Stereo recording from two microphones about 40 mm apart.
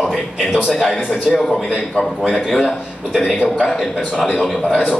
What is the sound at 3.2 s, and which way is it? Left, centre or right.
Speech, left.